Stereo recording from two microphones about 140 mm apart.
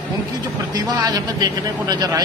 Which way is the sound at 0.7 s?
25° right (ahead or behind).